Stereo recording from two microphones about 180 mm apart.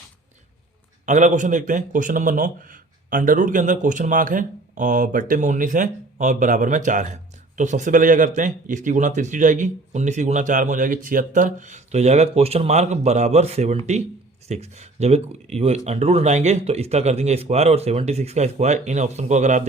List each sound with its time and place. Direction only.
1.0 s speech: 40° right (ahead or behind)